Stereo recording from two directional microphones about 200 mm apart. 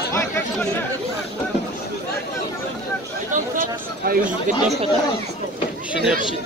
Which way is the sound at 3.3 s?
45° right (ahead or behind).